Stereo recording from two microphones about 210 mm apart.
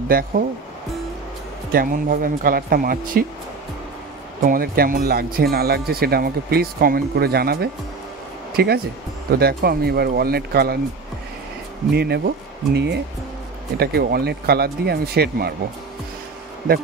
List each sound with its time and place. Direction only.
0.1 s speech: 45° right (ahead or behind)
1.7 s speech: 40° right (ahead or behind)
4.4 s speech: 45° right (ahead or behind)
11.9 s speech: 50° right (ahead or behind)